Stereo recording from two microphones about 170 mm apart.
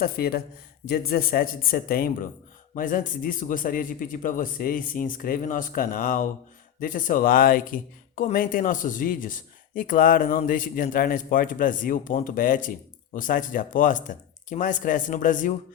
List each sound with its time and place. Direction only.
0.0 s speech: 65° left (ahead or behind)